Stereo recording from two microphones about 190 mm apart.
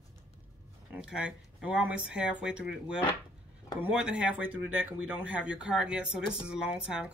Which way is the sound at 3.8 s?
5° right (ahead or behind).